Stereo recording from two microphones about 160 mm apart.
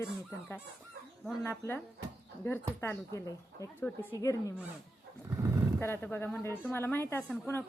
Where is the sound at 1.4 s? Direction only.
15° left (ahead or behind).